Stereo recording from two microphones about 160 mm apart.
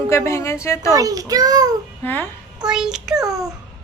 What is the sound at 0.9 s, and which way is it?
Speech, 20° right (ahead or behind).